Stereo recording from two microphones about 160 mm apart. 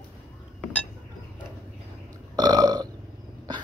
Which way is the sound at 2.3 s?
25° right (ahead or behind).